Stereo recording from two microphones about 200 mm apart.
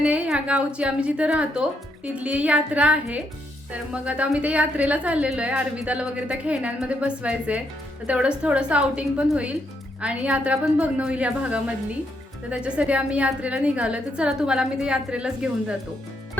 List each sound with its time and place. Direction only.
0.0 s a woman's voice: 5° right (ahead or behind)